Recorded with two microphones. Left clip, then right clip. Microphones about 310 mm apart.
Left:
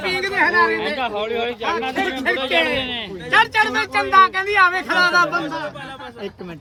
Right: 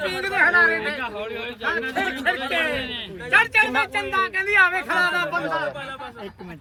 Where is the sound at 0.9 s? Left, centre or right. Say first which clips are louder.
Left 7 dB; left.